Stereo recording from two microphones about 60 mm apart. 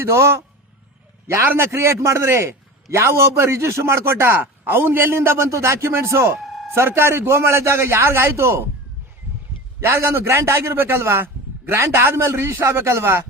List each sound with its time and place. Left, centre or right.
0.0 s a man's voice: right
6.7 s a man's voice: right
9.8 s a man's voice: right